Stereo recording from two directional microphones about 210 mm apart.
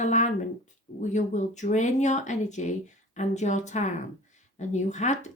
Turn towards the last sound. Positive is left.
turn(degrees=35)  # may be behind; listen again after turning